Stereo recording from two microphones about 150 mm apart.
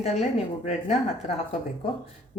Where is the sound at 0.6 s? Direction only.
50° left (ahead or behind).